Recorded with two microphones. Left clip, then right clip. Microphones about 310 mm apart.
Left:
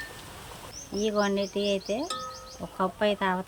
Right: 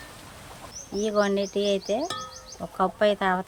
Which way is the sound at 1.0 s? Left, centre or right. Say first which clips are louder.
Right 3 dB; centre.